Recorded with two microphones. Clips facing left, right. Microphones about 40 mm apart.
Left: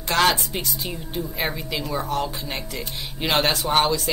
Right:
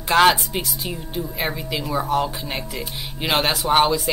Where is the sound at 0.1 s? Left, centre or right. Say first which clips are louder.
Right 4 dB; centre.